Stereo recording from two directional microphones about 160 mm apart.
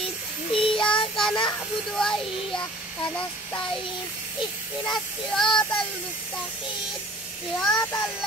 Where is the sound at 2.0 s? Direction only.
5° left (ahead or behind).